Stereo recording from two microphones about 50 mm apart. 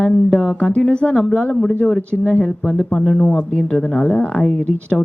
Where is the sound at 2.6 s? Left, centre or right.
Centre.